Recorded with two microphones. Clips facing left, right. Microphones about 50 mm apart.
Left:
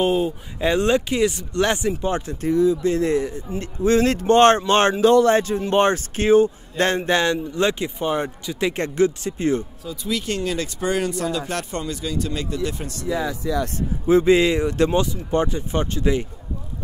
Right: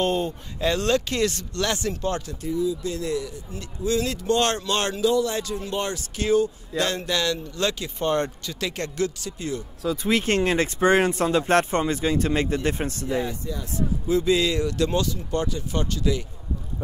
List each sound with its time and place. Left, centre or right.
0.0 s speech: centre
0.6 s speech: centre
2.4 s speech: left
2.8 s speech: left
5.0 s speech: left
8.0 s speech: centre
8.5 s speech: left
10.0 s speech: right
13.0 s speech: left
13.7 s speech: left